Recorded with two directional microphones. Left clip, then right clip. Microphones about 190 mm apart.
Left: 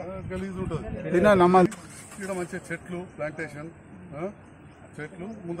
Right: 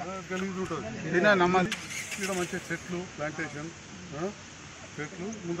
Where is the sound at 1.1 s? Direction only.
60° left (ahead or behind).